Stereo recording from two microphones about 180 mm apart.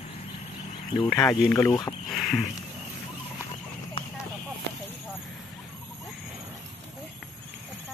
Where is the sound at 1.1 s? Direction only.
5° left (ahead or behind).